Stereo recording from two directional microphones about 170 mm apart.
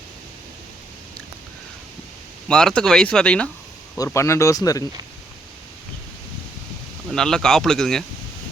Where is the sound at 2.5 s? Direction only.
5° left (ahead or behind).